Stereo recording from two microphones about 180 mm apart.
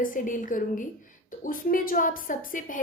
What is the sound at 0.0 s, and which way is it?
A woman's voice, 50° left (ahead or behind).